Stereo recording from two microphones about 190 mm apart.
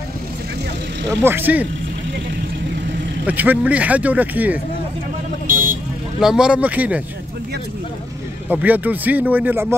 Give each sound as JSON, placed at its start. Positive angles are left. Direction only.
{"t": 1.2, "sound": "speech", "side_deg": -10}
{"t": 3.3, "sound": "speech", "side_deg": -10}
{"t": 5.5, "sound": "vehicle", "side_deg": -45}
{"t": 6.1, "sound": "speech", "side_deg": -5}
{"t": 8.5, "sound": "speech", "side_deg": -10}